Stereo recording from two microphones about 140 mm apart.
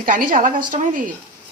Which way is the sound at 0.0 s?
75° right (ahead or behind).